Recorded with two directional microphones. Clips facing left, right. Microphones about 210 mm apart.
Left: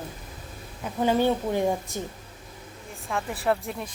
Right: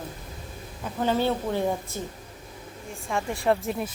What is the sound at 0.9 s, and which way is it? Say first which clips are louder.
A woman's voice: left 2 dB; 15° left (ahead or behind).